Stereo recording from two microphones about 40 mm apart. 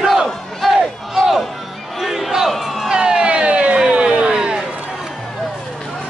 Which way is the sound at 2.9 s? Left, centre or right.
Centre.